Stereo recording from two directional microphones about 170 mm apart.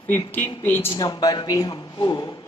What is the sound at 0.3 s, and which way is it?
Speech, 10° left (ahead or behind).